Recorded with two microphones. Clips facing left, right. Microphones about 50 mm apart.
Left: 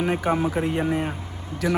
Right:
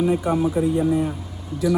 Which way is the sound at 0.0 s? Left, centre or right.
Left.